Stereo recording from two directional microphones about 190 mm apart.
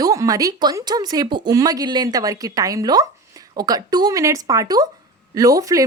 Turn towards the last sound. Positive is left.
turn(degrees=-15)  # may be behind; listen again after turning